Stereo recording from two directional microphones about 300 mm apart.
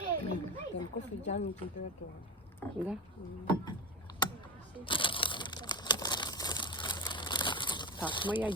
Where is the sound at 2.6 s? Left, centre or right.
Centre.